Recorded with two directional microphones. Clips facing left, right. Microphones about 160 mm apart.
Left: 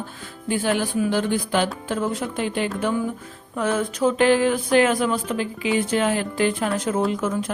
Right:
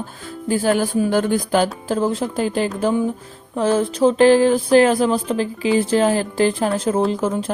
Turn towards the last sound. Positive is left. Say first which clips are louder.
# right 3 dB
turn(degrees=-30)  # may be behind; listen again after turning